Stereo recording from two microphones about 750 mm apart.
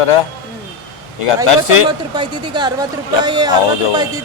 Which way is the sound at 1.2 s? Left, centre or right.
Left.